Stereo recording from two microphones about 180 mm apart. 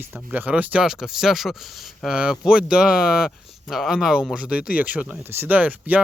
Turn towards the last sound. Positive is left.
turn(degrees=-10)  # may be behind; listen again after turning